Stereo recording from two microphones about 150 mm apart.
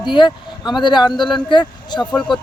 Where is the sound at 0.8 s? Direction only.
30° left (ahead or behind).